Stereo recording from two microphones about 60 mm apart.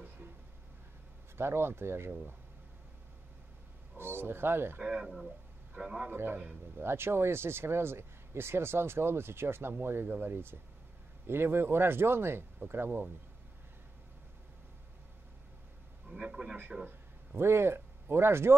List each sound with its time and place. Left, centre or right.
1.3 s speech: right
3.9 s speech: right
4.8 s a man's voice: centre
6.0 s speech: right
16.1 s a man's voice: centre
17.4 s speech: right